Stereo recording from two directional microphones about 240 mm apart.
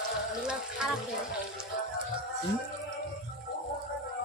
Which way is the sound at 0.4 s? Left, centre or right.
Centre.